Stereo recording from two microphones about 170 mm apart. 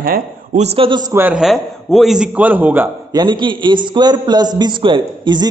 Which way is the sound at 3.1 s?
25° right (ahead or behind).